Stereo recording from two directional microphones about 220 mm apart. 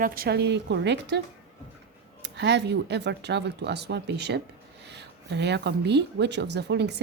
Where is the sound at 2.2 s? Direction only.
50° right (ahead or behind).